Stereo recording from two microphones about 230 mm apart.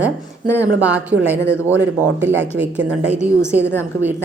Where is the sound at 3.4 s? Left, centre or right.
Centre.